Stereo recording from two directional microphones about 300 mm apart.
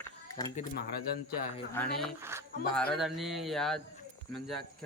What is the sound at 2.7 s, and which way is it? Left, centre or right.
Mantra, centre.